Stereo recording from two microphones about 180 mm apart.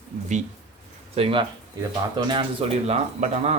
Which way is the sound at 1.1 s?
30° right (ahead or behind).